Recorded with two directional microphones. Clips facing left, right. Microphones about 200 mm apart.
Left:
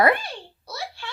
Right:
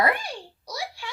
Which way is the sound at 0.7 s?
10° right (ahead or behind).